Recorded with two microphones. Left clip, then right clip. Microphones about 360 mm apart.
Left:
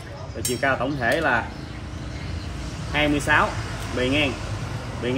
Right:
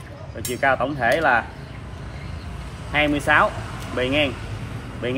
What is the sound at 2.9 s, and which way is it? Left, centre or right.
Speech, centre.